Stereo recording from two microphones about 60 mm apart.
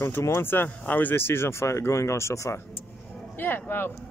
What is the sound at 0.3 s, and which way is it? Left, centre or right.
Speech, left.